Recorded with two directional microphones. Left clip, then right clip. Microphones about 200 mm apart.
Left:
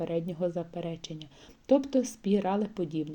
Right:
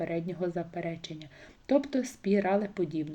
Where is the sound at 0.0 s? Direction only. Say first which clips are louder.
Left 2 dB; 25° left (ahead or behind).